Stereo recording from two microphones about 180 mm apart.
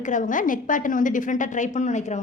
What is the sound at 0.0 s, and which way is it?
A woman's voice, 45° left (ahead or behind).